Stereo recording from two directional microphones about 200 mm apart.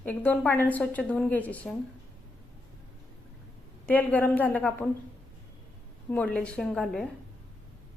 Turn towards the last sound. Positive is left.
turn(degrees=0)  # may be behind; listen again after turning